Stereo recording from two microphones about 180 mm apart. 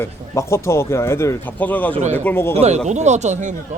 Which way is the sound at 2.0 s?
40° right (ahead or behind).